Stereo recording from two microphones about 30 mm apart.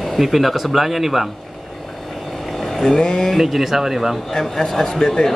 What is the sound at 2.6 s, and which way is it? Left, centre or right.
Vehicle, centre.